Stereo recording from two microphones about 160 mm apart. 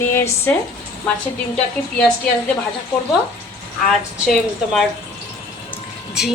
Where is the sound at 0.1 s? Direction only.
15° left (ahead or behind).